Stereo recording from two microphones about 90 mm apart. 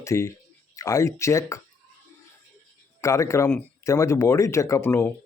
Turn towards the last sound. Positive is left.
turn(degrees=25)  # may be behind; listen again after turning